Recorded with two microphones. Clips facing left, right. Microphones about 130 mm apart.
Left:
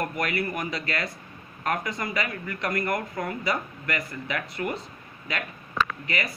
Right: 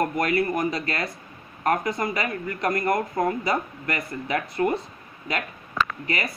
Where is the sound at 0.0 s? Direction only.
30° right (ahead or behind).